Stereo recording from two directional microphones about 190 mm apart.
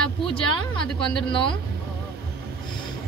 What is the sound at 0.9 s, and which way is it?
Speech, 25° left (ahead or behind).